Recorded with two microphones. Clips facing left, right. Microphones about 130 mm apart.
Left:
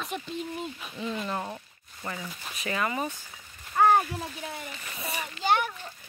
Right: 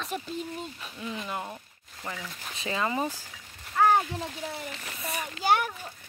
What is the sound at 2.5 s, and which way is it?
Speech, 25° right (ahead or behind).